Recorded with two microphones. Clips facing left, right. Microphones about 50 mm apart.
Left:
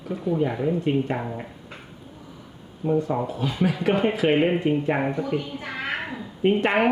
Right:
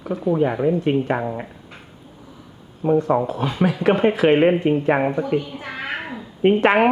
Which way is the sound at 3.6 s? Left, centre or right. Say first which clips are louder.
Right 4 dB; right.